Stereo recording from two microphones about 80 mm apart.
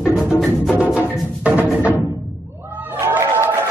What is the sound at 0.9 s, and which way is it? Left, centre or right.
Music, centre.